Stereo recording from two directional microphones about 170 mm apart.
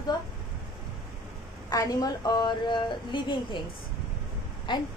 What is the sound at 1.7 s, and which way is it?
A woman's voice, 20° left (ahead or behind).